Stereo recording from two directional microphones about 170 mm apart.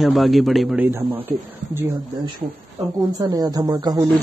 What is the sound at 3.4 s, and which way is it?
Speech, 20° right (ahead or behind).